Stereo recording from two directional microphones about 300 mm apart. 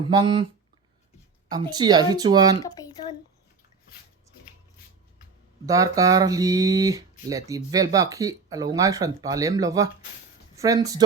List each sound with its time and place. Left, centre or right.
0.0 s speech: centre
1.5 s speech: centre
2.6 s a sound: centre
5.6 s speech: centre